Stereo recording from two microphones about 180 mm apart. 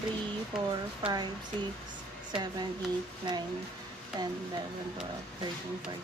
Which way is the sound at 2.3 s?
25° right (ahead or behind).